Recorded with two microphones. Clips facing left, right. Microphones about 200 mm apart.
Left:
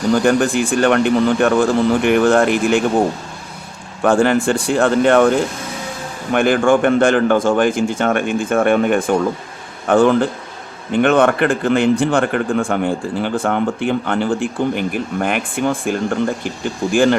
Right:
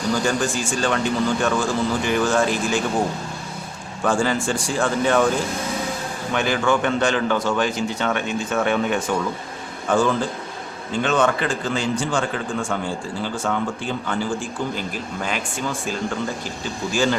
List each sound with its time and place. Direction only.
0.1 s a man's voice: 60° left (ahead or behind)
4.0 s a man's voice: 60° left (ahead or behind)
6.3 s a man's voice: 55° left (ahead or behind)